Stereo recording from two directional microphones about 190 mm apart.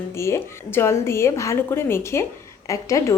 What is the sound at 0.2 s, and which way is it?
A woman's voice, 15° left (ahead or behind).